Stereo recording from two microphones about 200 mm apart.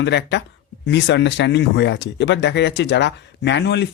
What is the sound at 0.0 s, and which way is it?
Speech, 60° left (ahead or behind).